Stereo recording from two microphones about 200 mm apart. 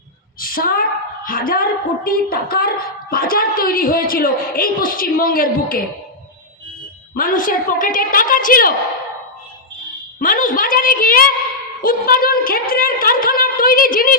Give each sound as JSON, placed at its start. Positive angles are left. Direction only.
{"t": 0.3, "sound": "a woman's voice", "side_deg": 45}
{"t": 7.1, "sound": "a man's voice", "side_deg": 45}
{"t": 10.2, "sound": "a sound", "side_deg": 45}
{"t": 11.8, "sound": "a man's voice", "side_deg": 45}